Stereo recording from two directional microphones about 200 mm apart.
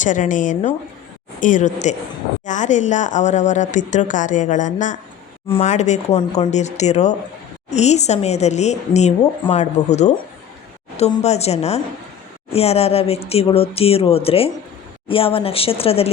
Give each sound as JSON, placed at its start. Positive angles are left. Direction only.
{"t": 0.0, "sound": "a woman's voice", "side_deg": 40}